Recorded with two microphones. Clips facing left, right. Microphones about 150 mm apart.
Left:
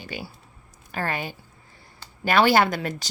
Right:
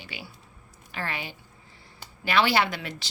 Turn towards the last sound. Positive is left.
turn(degrees=45)  # may be behind; listen again after turning